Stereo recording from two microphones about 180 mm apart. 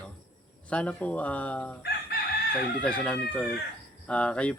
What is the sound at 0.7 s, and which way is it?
Speech, 5° left (ahead or behind).